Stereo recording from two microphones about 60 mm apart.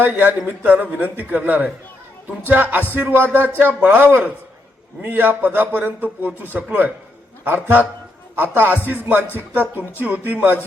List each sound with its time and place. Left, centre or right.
0.0 s a man's voice: right